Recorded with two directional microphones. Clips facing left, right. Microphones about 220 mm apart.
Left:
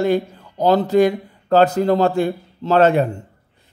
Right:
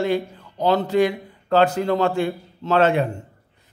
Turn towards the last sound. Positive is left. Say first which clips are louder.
# left 4 dB
turn(degrees=40)  # may be behind; listen again after turning